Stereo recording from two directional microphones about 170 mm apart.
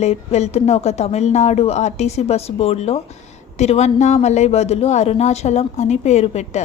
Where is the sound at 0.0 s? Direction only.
40° left (ahead or behind).